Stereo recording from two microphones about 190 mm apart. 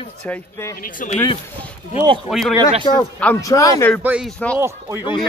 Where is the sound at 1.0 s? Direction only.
45° left (ahead or behind).